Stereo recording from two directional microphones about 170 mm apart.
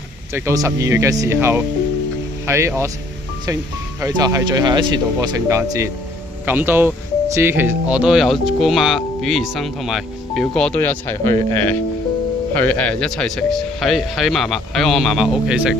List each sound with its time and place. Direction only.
0.3 s speech: 15° right (ahead or behind)
4.0 s speech: 20° right (ahead or behind)